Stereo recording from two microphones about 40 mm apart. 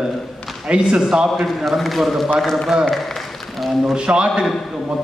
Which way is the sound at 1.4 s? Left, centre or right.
Centre.